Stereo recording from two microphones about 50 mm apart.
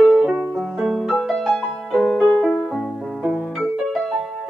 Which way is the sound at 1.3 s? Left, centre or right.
Centre.